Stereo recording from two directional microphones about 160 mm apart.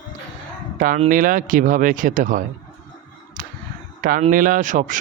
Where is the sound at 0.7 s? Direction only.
55° right (ahead or behind).